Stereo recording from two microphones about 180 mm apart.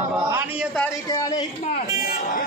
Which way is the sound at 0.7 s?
15° left (ahead or behind).